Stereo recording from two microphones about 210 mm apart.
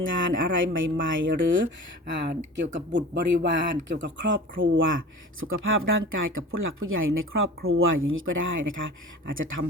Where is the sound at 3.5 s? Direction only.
60° right (ahead or behind).